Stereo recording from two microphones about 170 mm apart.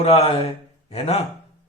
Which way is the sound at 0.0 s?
35° left (ahead or behind).